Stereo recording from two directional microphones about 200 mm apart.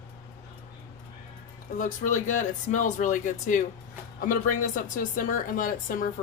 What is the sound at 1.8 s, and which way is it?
A woman's voice, 40° left (ahead or behind).